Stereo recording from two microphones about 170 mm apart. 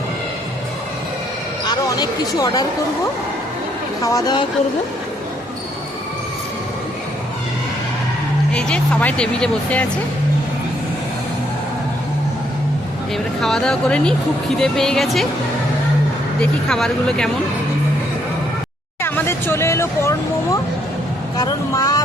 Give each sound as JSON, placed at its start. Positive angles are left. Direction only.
{"t": 1.6, "sound": "speech", "side_deg": 25}
{"t": 4.0, "sound": "speech", "side_deg": 20}
{"t": 8.5, "sound": "speech", "side_deg": 5}
{"t": 13.4, "sound": "speech", "side_deg": 5}
{"t": 16.4, "sound": "speech", "side_deg": 5}
{"t": 19.0, "sound": "speech", "side_deg": 15}